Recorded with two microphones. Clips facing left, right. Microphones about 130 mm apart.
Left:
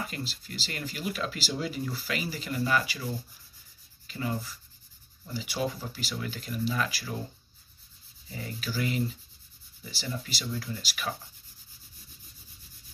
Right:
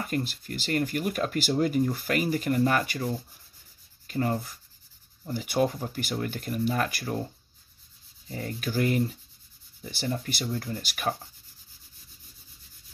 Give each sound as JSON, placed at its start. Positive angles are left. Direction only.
{"t": 0.0, "sound": "speech", "side_deg": -55}
{"t": 4.1, "sound": "speech", "side_deg": -55}
{"t": 8.3, "sound": "speech", "side_deg": -45}